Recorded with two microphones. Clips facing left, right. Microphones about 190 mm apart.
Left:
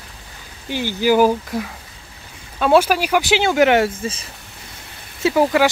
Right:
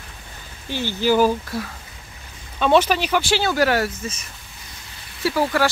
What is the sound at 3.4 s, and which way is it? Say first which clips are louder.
Speech: left 5 dB; 20° left (ahead or behind).